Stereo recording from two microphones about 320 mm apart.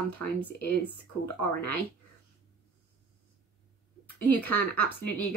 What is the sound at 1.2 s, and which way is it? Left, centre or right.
Speech, left.